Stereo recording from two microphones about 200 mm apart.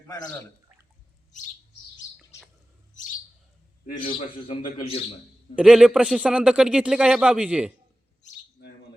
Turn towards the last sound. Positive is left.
turn(degrees=-5)  # may be behind; listen again after turning